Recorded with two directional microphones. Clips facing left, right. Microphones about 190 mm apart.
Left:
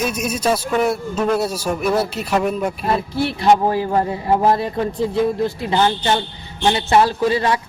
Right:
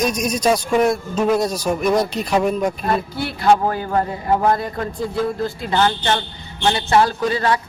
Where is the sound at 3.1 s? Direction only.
25° left (ahead or behind).